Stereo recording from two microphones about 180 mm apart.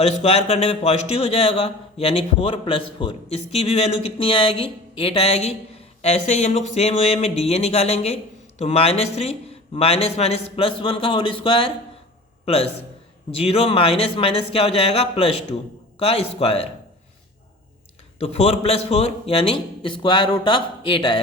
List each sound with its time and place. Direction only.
0.2 s speech: 35° left (ahead or behind)
13.3 s speech: 35° left (ahead or behind)
18.2 s speech: 35° left (ahead or behind)